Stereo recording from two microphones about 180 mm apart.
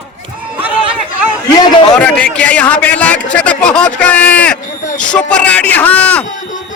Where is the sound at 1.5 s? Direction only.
20° left (ahead or behind).